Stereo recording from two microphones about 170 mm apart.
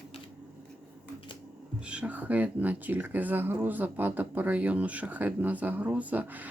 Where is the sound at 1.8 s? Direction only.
5° right (ahead or behind).